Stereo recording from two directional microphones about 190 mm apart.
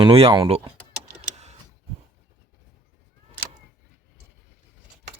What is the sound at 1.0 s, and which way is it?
Printer, 40° right (ahead or behind).